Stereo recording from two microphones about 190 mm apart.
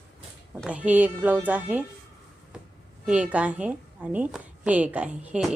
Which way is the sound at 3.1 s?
5° right (ahead or behind).